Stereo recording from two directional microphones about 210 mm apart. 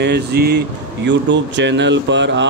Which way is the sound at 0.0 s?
50° right (ahead or behind).